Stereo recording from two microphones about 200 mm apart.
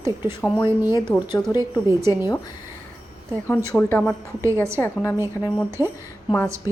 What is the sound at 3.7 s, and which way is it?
Speech, 10° left (ahead or behind).